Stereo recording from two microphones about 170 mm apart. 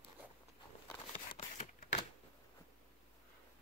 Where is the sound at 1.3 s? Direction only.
45° left (ahead or behind).